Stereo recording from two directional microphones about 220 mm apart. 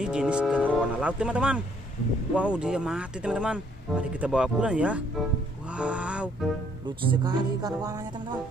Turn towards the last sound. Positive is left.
turn(degrees=-15)  # may be behind; listen again after turning